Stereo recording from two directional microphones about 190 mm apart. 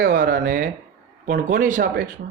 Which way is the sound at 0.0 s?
50° right (ahead or behind).